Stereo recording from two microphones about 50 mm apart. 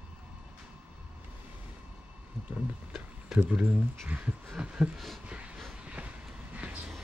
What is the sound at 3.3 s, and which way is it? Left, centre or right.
Speech, centre.